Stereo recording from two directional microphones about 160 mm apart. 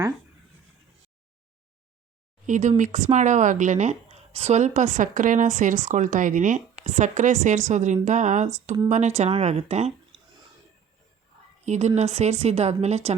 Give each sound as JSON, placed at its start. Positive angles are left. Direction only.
{"t": 2.5, "sound": "speech", "side_deg": -50}
{"t": 11.6, "sound": "speech", "side_deg": -45}